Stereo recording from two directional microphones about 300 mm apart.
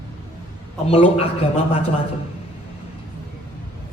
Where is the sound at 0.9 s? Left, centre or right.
Centre.